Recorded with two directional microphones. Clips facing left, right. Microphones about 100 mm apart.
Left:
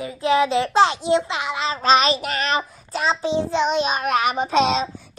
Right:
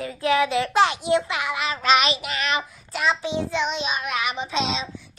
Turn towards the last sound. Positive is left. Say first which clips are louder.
# left 7 dB
turn(degrees=50)  # may be behind; listen again after turning